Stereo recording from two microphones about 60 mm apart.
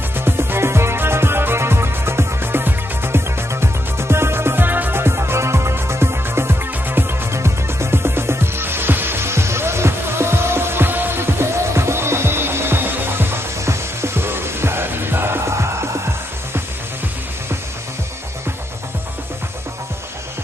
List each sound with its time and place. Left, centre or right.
0.1 s music: right
7.3 s music: right